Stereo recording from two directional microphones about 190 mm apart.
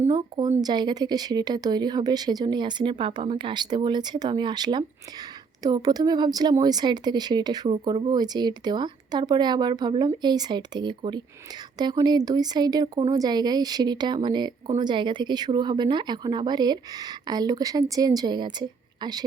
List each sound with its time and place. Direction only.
0.1 s speech: 25° right (ahead or behind)